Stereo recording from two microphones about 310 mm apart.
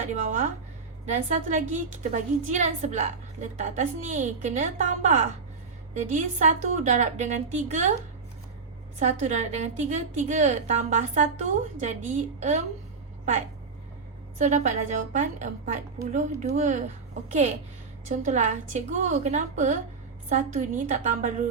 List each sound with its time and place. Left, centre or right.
1.0 s a woman's voice: right
9.0 s a woman's voice: right
14.3 s a woman's voice: right